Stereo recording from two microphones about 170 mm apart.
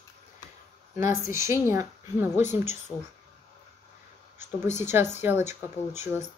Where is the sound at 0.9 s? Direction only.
15° right (ahead or behind).